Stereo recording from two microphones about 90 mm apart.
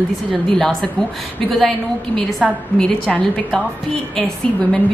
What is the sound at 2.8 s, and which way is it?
Speech, 10° left (ahead or behind).